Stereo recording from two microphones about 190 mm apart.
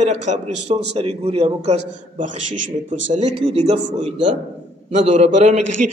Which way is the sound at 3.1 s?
35° right (ahead or behind).